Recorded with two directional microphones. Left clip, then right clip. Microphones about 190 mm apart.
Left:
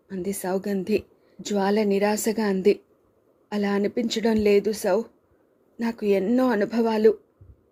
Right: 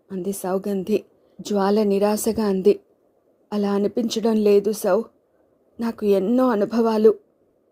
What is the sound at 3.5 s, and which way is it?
Speech, 20° right (ahead or behind).